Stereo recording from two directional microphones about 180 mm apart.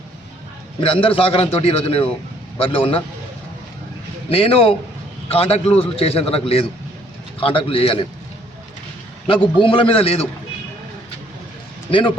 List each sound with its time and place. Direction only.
0.8 s a man's voice: 30° left (ahead or behind)
4.3 s a man's voice: 30° left (ahead or behind)
9.2 s a man's voice: 30° left (ahead or behind)
11.9 s a man's voice: 30° left (ahead or behind)